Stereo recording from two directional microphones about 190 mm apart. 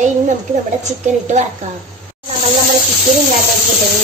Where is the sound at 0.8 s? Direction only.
40° right (ahead or behind).